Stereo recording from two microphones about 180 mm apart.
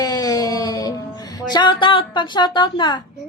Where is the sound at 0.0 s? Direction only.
20° left (ahead or behind).